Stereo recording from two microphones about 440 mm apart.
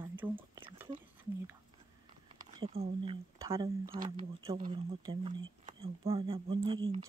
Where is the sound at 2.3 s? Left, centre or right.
Centre.